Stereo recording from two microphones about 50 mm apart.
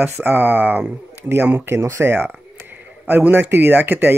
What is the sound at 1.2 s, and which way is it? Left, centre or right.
Speech, right.